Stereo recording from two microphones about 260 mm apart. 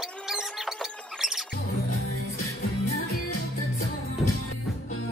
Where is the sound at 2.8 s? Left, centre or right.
Left.